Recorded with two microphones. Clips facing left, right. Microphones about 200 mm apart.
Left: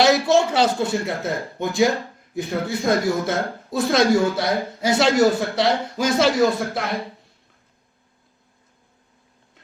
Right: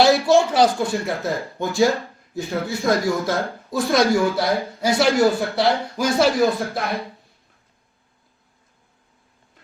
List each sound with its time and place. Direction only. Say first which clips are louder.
0.0 s speech: right 1 dB; 20° left (ahead or behind)